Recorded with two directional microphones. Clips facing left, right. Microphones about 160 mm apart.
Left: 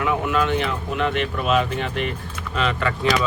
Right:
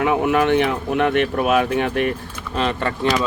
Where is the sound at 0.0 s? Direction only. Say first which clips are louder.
Right 4 dB; 60° right (ahead or behind).